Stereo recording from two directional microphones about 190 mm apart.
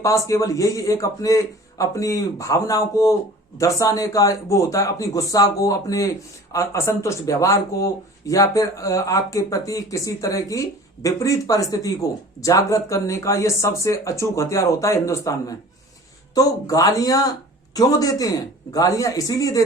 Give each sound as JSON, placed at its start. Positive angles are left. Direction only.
{"t": 0.0, "sound": "speech", "side_deg": 15}